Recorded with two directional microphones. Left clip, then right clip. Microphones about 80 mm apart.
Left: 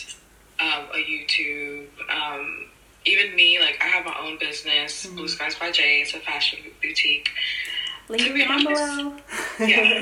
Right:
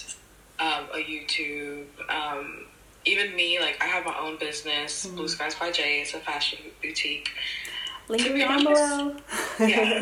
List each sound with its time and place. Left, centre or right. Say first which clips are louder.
0.5 s a sound: left 4 dB; right
3.0 s speech: left 7 dB; right
9.3 s speech: even; centre
9.6 s speech: left 6 dB; right